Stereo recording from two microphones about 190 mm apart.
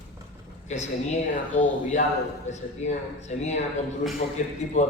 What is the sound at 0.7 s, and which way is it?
Speech, 40° left (ahead or behind).